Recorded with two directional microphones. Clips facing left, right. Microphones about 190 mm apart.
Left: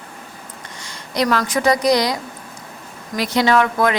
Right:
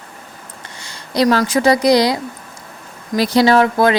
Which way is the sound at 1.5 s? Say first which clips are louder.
Right 4 dB; 30° right (ahead or behind).